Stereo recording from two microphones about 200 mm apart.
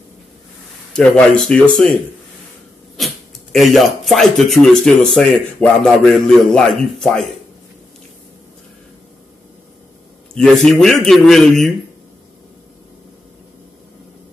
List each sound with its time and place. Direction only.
0.9 s speech: 5° left (ahead or behind)
3.0 s a sound: centre (ahead or behind)
3.5 s speech: centre (ahead or behind)
10.3 s speech: 5° left (ahead or behind)